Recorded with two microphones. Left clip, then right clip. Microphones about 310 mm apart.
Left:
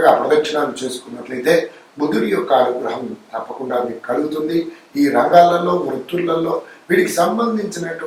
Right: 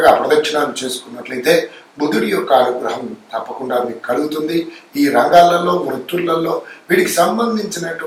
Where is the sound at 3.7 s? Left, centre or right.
Centre.